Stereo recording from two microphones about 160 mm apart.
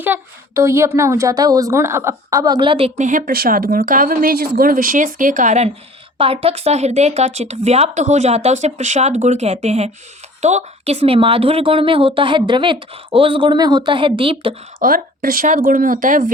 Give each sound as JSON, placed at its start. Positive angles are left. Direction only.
{"t": 0.0, "sound": "a woman's voice", "side_deg": -15}
{"t": 3.0, "sound": "a woman's voice", "side_deg": -55}
{"t": 14.8, "sound": "speech", "side_deg": -60}